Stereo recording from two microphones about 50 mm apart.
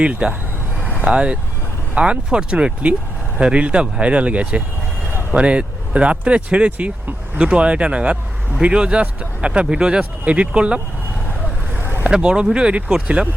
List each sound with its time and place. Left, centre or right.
0.0 s speech: right
0.9 s vehicle: right
2.0 s speech: right
7.3 s speech: right
11.7 s vehicle: right
12.1 s speech: centre